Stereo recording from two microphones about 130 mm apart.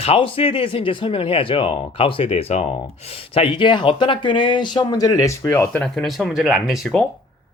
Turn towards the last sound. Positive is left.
turn(degrees=0)  # may be behind; listen again after turning